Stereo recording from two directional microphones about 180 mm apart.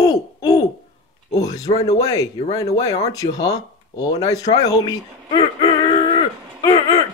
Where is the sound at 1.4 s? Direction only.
20° left (ahead or behind).